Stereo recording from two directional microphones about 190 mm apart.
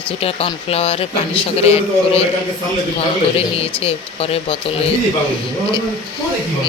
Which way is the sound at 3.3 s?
30° left (ahead or behind).